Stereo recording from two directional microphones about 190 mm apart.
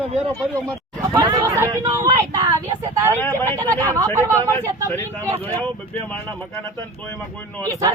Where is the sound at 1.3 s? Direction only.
15° right (ahead or behind).